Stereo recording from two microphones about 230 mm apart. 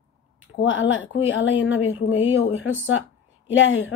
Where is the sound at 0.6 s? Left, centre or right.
Left.